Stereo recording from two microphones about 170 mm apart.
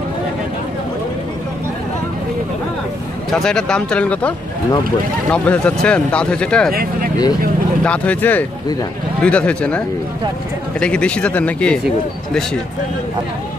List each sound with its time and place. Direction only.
3.3 s speech: 5° left (ahead or behind)
5.3 s speech: 5° left (ahead or behind)
6.7 s speech: 60° right (ahead or behind)
7.8 s speech: 5° left (ahead or behind)